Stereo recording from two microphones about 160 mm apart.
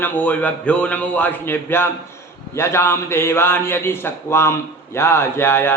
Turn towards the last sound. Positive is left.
turn(degrees=15)  # may be behind; listen again after turning